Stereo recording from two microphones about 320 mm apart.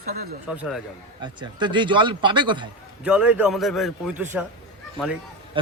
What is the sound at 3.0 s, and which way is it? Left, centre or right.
A man's voice, centre.